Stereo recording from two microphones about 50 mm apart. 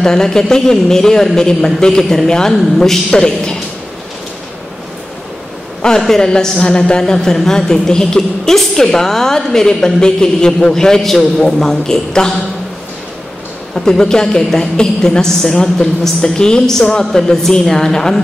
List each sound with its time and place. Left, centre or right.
0.0 s a woman's voice: centre
5.8 s a woman's voice: centre
13.7 s a woman's voice: centre